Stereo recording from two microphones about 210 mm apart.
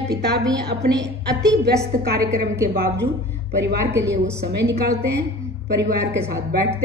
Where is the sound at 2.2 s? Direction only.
15° right (ahead or behind).